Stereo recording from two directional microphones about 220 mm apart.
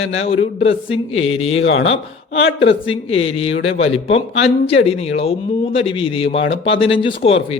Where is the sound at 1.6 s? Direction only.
60° left (ahead or behind).